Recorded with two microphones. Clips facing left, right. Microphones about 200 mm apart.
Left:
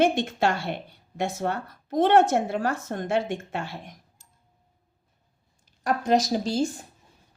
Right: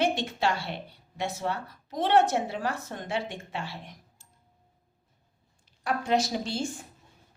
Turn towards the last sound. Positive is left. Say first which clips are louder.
# left 6 dB
turn(degrees=40)  # may be behind; listen again after turning